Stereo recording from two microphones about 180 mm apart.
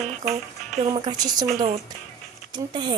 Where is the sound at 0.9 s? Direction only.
20° right (ahead or behind).